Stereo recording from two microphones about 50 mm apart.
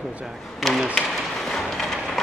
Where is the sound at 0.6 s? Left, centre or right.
Centre.